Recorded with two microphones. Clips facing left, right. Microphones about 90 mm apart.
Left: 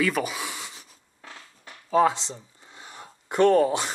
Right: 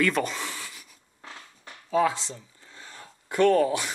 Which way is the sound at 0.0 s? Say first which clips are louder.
Even; 5° left (ahead or behind).